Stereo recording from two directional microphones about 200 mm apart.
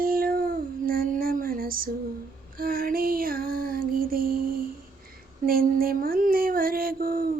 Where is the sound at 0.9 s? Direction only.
45° right (ahead or behind).